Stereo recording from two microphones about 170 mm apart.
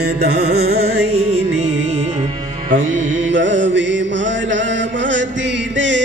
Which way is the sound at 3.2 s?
90° right.